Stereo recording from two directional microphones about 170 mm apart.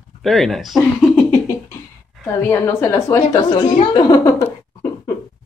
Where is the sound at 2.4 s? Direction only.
15° left (ahead or behind).